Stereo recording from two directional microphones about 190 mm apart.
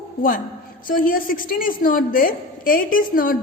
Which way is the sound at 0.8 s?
50° left (ahead or behind).